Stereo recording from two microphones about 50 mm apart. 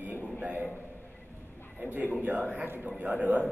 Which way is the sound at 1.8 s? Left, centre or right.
Right.